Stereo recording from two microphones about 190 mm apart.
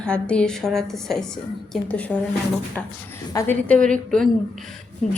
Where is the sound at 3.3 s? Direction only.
15° left (ahead or behind).